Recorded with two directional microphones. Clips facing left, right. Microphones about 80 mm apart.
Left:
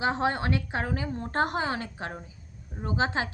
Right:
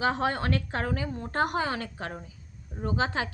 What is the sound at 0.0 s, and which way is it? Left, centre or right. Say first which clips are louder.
A woman's voice: even; left.